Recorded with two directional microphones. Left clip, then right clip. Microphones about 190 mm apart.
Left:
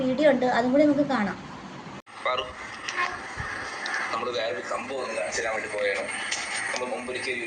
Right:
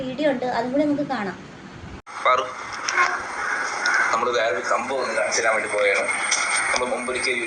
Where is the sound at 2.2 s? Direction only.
25° right (ahead or behind).